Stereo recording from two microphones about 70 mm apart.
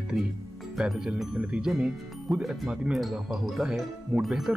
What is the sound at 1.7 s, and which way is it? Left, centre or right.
Speech, centre.